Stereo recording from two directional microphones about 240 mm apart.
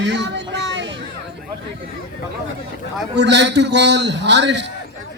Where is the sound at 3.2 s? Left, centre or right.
Right.